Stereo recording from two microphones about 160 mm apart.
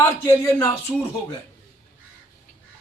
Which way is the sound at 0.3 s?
15° left (ahead or behind).